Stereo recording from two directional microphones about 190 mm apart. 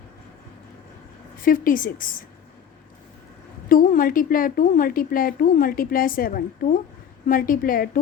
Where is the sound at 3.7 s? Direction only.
50° left (ahead or behind).